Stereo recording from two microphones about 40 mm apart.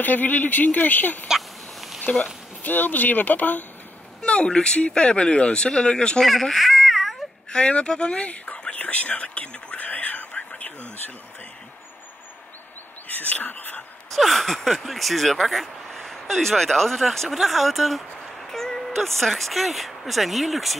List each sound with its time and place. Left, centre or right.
0.0 s speech: left
1.3 s a sound: centre
2.6 s speech: left
4.2 s speech: left
6.2 s baby cry: centre
7.5 s speech: left
9.8 s whispering: left
13.1 s speech: left
14.1 s speech: centre